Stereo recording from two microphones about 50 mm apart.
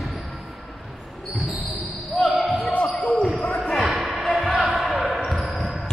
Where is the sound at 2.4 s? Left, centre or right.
Centre.